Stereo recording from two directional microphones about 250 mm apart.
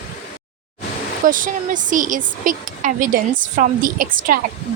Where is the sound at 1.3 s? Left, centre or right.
Right.